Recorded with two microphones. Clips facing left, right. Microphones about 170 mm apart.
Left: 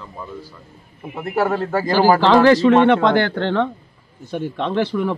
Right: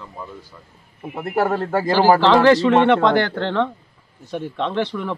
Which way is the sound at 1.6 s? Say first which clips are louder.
Even; 30° right (ahead or behind).